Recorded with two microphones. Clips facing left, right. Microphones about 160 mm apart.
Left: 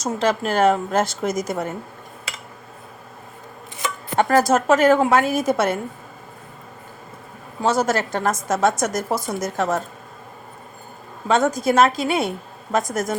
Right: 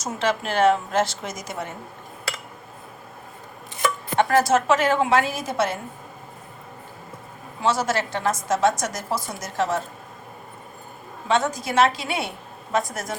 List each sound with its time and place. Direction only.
0.2 s a woman's voice: 40° left (ahead or behind)
4.2 s a woman's voice: 40° left (ahead or behind)
7.6 s a woman's voice: 45° left (ahead or behind)
11.3 s a woman's voice: 45° left (ahead or behind)